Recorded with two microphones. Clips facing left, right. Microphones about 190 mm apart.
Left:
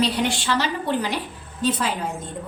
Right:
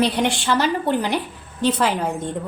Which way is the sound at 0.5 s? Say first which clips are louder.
Right 4 dB; 55° right (ahead or behind).